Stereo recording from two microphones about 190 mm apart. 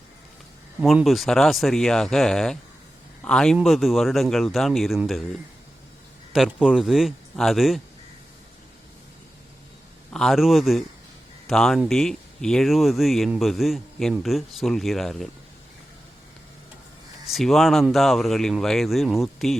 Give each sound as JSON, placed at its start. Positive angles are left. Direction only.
{"t": 0.8, "sound": "speech", "side_deg": -5}
{"t": 6.3, "sound": "speech", "side_deg": -5}
{"t": 10.1, "sound": "speech", "side_deg": 0}
{"t": 17.3, "sound": "speech", "side_deg": 0}